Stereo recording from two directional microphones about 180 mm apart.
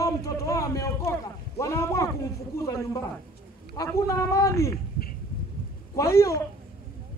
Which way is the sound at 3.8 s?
20° left (ahead or behind).